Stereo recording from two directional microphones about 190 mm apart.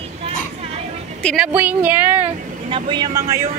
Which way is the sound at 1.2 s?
Centre (ahead or behind).